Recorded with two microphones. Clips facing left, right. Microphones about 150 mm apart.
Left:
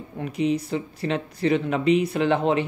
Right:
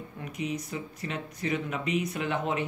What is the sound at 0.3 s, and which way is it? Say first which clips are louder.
Speech: left 10 dB; 30° left (ahead or behind).